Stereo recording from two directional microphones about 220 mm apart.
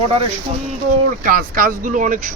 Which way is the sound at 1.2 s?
40° right (ahead or behind).